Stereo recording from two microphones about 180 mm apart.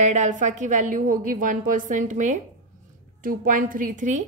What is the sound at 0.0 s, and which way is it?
A woman's voice, 40° right (ahead or behind).